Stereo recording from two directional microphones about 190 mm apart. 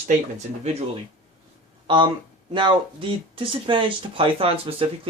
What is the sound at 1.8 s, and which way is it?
Speech, 25° right (ahead or behind).